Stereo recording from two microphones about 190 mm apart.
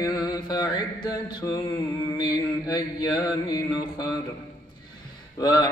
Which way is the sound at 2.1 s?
20° left (ahead or behind).